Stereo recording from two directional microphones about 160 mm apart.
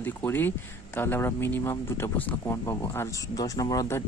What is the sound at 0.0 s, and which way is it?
Speech, 10° left (ahead or behind).